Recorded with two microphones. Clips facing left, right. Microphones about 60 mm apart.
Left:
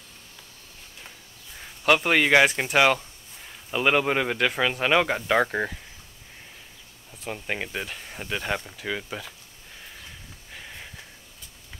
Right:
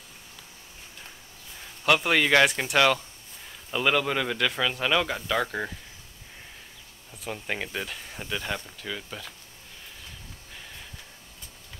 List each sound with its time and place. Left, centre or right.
1.9 s speech: centre
7.2 s speech: centre